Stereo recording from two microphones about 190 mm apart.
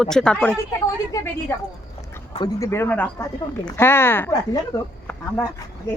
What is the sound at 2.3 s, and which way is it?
Speech, 20° left (ahead or behind).